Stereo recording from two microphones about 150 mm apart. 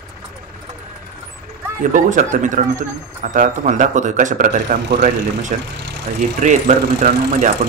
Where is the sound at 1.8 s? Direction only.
60° right (ahead or behind).